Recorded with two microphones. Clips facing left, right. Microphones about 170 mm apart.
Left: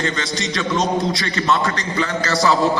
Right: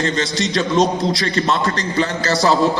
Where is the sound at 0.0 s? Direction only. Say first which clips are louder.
Right 3 dB; 35° right (ahead or behind).